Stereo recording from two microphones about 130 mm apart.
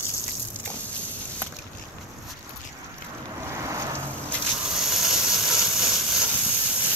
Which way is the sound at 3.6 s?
25° right (ahead or behind).